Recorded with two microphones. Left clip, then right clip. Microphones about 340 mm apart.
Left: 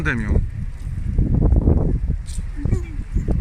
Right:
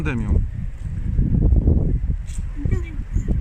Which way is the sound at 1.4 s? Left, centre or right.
Left.